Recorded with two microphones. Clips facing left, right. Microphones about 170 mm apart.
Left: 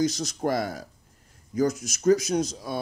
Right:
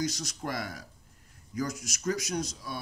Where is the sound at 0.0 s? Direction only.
25° left (ahead or behind).